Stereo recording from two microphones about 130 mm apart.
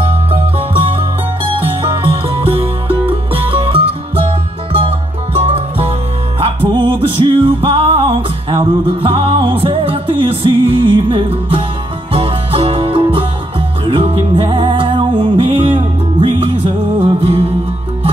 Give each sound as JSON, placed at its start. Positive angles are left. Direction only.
{"t": 2.0, "sound": "music", "side_deg": -45}